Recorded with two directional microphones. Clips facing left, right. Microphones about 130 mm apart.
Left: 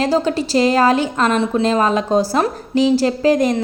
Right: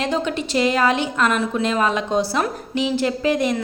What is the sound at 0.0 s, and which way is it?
A woman's voice, 35° left (ahead or behind).